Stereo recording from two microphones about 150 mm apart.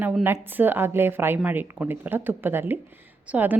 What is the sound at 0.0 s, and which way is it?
A woman's voice, 10° right (ahead or behind).